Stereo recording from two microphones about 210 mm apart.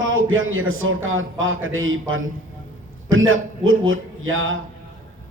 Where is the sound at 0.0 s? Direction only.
70° right (ahead or behind).